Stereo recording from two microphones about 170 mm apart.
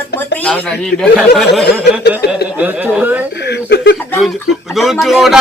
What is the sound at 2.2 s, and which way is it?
Chuckle, 70° left (ahead or behind).